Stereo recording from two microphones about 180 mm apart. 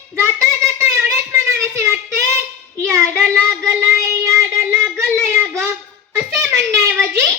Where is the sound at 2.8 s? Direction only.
15° right (ahead or behind).